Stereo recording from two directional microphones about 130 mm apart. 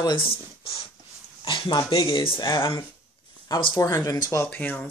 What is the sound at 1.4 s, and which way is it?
Speech, 40° left (ahead or behind).